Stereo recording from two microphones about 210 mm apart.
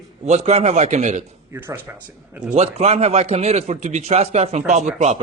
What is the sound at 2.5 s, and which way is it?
A man's voice, 30° right (ahead or behind).